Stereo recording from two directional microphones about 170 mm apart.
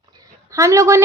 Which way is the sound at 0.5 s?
20° right (ahead or behind).